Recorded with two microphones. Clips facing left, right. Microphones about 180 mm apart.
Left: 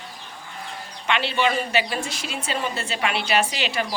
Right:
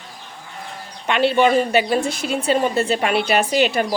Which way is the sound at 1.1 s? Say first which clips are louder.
Right 7 dB; 50° right (ahead or behind).